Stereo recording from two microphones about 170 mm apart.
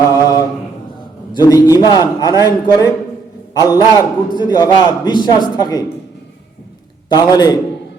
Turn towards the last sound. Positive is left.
turn(degrees=25)  # may be behind; listen again after turning